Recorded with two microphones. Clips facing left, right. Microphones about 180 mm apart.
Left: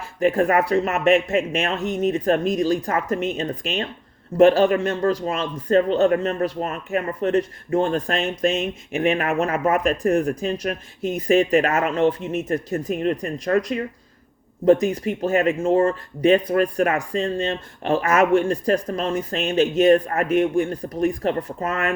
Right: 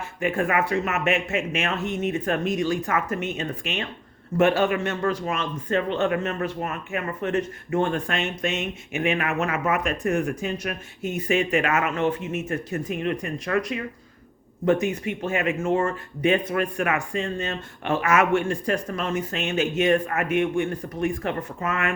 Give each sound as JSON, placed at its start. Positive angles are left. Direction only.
{"t": 0.2, "sound": "speech", "side_deg": 40}